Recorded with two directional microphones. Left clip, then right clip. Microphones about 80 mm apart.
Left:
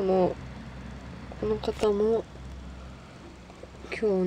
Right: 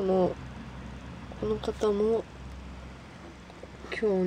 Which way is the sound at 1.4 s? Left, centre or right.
Centre.